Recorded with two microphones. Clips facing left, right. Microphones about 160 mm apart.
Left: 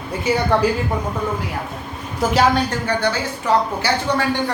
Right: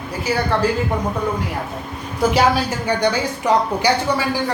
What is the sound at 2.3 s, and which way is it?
A man's voice, 5° right (ahead or behind).